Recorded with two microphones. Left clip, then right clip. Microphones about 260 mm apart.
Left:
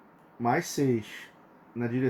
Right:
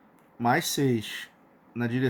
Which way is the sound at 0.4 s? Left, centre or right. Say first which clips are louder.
Right 2 dB; right.